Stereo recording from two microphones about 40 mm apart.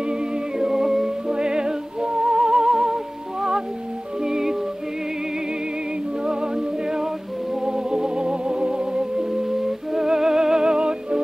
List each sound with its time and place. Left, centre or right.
0.0 s music: right
0.7 s music: centre
1.2 s music: centre
6.2 s music: centre